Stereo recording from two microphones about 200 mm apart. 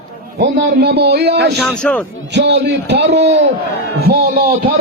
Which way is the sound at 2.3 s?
55° right (ahead or behind).